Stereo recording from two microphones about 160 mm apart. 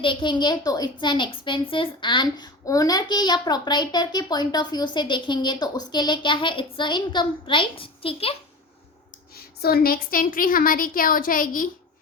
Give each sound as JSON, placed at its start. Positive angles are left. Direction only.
{"t": 0.0, "sound": "a woman's voice", "side_deg": 30}
{"t": 9.3, "sound": "a woman's voice", "side_deg": 75}